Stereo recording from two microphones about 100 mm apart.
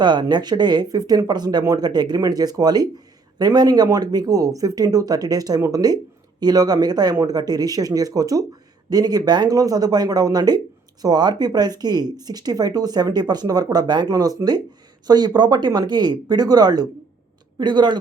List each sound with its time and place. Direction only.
0.0 s speech: 50° right (ahead or behind)